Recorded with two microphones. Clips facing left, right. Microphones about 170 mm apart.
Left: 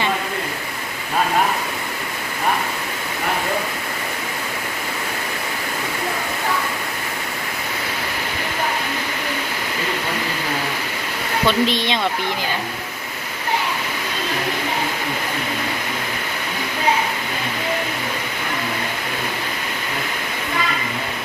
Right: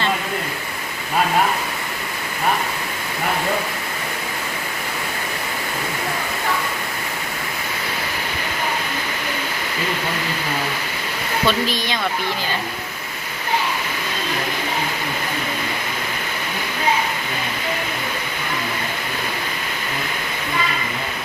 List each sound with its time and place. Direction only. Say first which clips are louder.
11.4 s speech: left 3 dB; 25° left (ahead or behind)